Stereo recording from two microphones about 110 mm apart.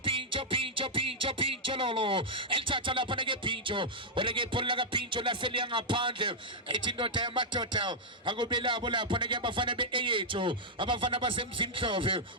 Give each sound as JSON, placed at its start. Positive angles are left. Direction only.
{"t": 0.0, "sound": "music", "side_deg": -50}